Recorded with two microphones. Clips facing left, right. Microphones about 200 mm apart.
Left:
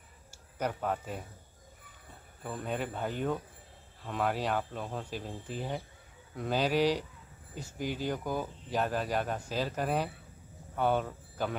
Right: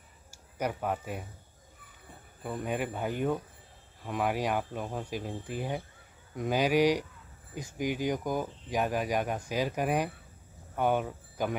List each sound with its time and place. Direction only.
0.3 s speech: 10° right (ahead or behind)
2.4 s speech: 10° right (ahead or behind)